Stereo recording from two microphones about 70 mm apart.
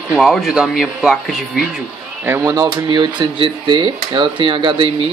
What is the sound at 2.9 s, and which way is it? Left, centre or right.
Speech, right.